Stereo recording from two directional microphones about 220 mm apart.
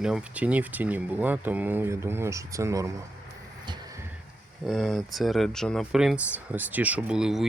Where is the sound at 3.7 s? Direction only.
15° right (ahead or behind).